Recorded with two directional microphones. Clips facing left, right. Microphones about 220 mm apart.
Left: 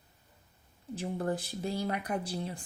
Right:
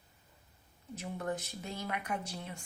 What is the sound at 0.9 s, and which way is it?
Speech, 30° left (ahead or behind).